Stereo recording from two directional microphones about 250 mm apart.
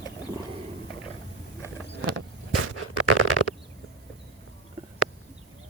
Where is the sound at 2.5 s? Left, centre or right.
Right.